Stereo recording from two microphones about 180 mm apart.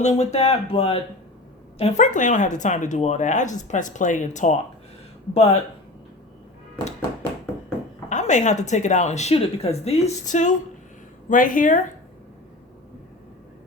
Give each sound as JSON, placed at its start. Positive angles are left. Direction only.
{"t": 0.0, "sound": "speech", "side_deg": 40}
{"t": 1.8, "sound": "speech", "side_deg": 45}
{"t": 8.1, "sound": "speech", "side_deg": 40}